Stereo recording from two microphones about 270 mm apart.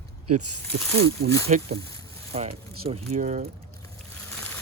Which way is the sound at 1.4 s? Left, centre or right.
Right.